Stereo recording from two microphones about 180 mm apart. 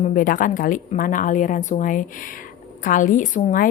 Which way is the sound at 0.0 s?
50° left (ahead or behind).